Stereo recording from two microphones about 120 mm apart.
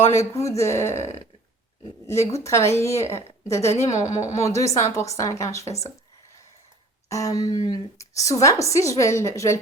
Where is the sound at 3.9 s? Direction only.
75° left (ahead or behind).